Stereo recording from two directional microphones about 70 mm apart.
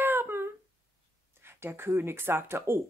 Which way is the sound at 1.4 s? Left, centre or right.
Right.